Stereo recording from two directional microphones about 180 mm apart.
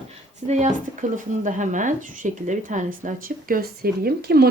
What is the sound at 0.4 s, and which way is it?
Speech, 40° right (ahead or behind).